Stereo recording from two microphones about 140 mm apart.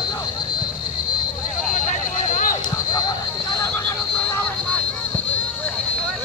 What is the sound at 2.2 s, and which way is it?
Basketball bounce, 65° left (ahead or behind).